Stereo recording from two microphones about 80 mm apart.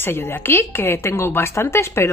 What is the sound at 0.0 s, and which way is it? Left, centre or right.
A woman's voice, left.